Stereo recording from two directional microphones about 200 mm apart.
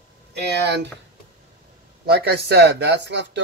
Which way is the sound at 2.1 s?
55° right (ahead or behind).